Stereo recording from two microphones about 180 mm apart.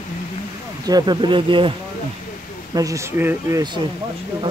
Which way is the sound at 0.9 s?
25° right (ahead or behind).